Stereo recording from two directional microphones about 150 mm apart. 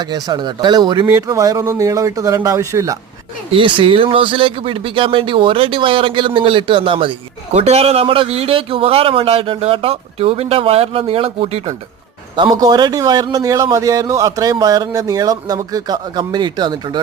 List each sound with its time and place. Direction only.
0.0 s a man's voice: 25° right (ahead or behind)
3.5 s a man's voice: 35° right (ahead or behind)
12.4 s a man's voice: 25° right (ahead or behind)